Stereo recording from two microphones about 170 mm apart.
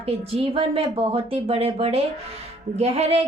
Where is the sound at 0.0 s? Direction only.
35° right (ahead or behind).